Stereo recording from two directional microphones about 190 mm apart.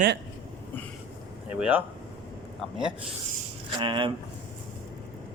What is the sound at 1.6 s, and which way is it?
Speech, 10° right (ahead or behind).